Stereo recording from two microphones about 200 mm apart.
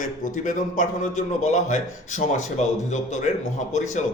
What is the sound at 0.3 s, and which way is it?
A man's voice, 40° left (ahead or behind).